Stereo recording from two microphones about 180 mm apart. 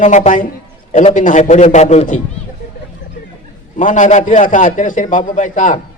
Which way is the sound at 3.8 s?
45° left (ahead or behind).